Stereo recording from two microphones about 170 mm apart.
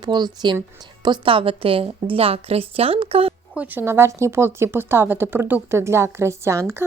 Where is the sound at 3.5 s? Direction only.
15° right (ahead or behind).